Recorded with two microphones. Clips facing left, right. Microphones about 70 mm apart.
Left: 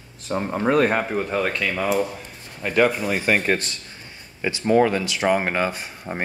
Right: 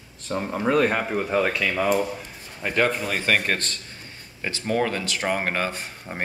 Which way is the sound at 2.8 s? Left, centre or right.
Centre.